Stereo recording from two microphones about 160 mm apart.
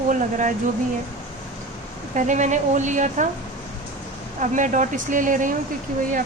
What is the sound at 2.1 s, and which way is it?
Speech, 50° right (ahead or behind).